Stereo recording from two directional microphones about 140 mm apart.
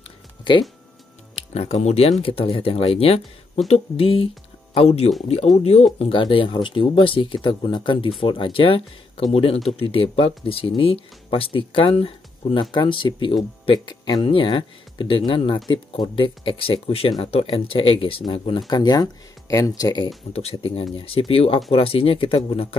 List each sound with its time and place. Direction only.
1.3 s speech: 45° left (ahead or behind)
18.7 s speech: 25° left (ahead or behind)
20.3 s speech: 45° left (ahead or behind)